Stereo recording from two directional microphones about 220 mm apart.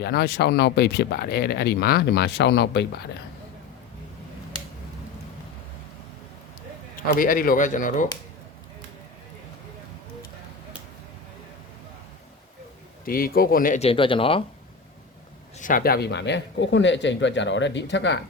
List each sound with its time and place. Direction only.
0.0 s speech: 45° left (ahead or behind)
6.9 s speech: 40° left (ahead or behind)
13.1 s speech: 40° left (ahead or behind); by 14.4 s 25° left (ahead or behind)
15.5 s speech: 35° left (ahead or behind); by 18.2 s 55° left (ahead or behind)